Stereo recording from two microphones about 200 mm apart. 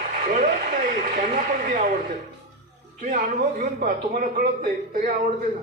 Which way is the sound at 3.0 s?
40° right (ahead or behind).